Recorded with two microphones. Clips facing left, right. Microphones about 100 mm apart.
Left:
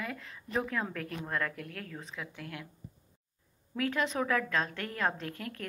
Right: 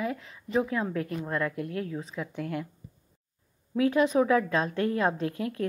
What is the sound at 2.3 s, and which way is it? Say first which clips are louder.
Speech: right 10 dB; 45° right (ahead or behind).